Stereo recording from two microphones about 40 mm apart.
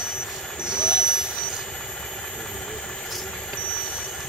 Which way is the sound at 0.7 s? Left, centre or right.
Centre.